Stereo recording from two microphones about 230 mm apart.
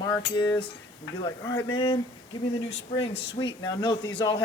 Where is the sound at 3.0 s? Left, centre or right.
Left.